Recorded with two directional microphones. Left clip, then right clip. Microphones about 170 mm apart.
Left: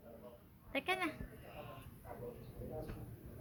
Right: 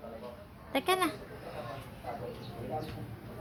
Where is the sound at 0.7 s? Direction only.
20° right (ahead or behind).